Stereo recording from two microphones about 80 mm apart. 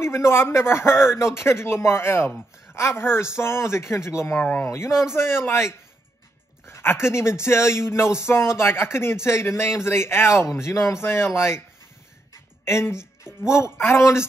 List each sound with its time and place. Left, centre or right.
0.0 s a man's voice: left
12.6 s a man's voice: left